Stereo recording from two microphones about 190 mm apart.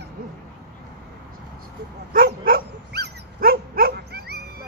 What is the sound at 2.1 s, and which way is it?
Dog, 50° right (ahead or behind).